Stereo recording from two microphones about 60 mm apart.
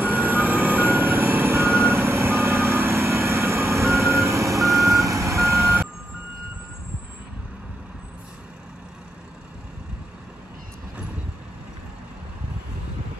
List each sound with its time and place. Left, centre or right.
0.0 s vehicle: right